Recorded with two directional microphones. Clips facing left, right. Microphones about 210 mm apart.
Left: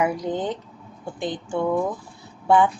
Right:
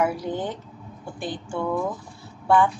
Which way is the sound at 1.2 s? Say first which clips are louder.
Left 4 dB; 20° left (ahead or behind).